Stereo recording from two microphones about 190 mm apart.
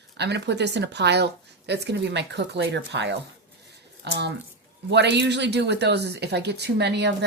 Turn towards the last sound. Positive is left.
turn(degrees=-60)  # may be behind; listen again after turning